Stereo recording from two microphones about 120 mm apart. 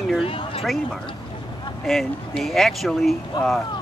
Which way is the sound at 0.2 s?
50° left (ahead or behind).